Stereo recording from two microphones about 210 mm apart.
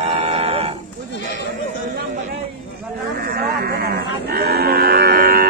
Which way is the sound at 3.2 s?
45° right (ahead or behind).